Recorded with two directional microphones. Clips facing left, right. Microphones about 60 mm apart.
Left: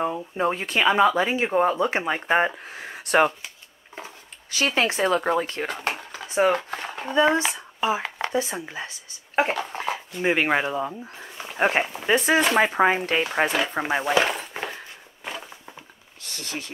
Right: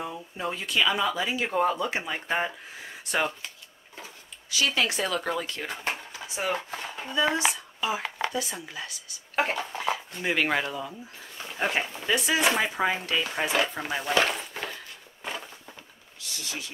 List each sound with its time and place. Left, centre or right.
0.0 s speech: left
1.9 s speech: left
3.9 s speech: left
5.7 s speech: left
7.5 s a sound: left
8.3 s speech: left
9.5 s speech: left
9.8 s speech: left
10.8 s speech: left
14.1 s cutlery: left
16.2 s speech: left